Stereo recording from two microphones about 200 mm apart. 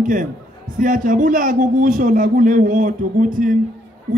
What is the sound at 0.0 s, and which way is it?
A man's voice, 40° right (ahead or behind).